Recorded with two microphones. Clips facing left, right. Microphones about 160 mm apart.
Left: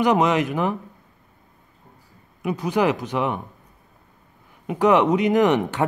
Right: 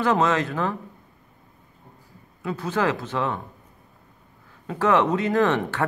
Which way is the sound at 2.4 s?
15° left (ahead or behind).